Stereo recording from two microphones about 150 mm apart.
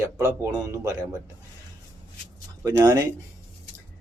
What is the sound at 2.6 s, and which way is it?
Speech, 25° right (ahead or behind).